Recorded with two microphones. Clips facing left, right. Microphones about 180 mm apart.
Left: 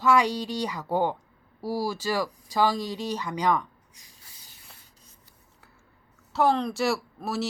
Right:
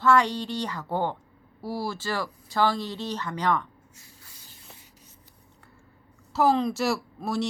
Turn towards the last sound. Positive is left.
turn(degrees=0)  # may be behind; listen again after turning